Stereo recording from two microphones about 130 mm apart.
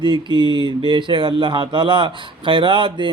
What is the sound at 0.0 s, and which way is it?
A man's voice, 35° right (ahead or behind).